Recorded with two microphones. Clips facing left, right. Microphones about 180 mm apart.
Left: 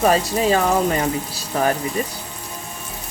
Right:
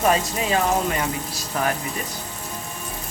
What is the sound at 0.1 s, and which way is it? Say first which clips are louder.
Speech: left 4 dB; 35° left (ahead or behind).